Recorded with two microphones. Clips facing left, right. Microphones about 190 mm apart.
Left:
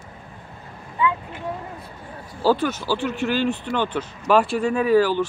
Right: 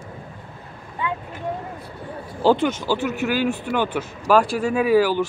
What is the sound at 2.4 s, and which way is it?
Speech, 20° right (ahead or behind).